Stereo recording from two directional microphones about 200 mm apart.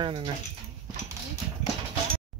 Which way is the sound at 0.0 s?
25° right (ahead or behind).